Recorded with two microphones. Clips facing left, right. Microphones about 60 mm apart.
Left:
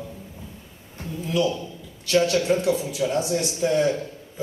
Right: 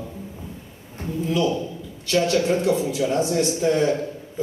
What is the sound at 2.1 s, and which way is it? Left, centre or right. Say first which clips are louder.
A man's voice: even; right.